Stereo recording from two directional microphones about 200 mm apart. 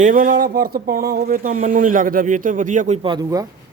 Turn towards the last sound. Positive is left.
turn(degrees=-20)  # may be behind; listen again after turning